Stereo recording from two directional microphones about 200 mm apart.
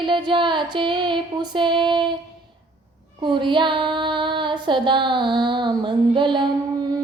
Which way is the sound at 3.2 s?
25° right (ahead or behind).